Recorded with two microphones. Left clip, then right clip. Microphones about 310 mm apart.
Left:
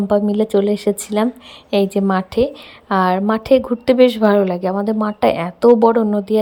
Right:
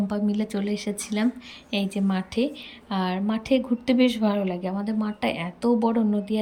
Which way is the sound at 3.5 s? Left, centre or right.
Left.